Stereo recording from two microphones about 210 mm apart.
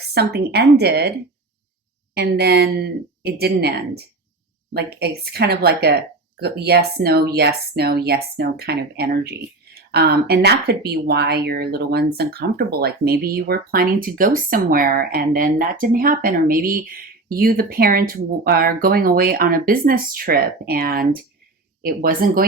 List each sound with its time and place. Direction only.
0.1 s speech: 50° right (ahead or behind)
2.1 s speech: 50° right (ahead or behind)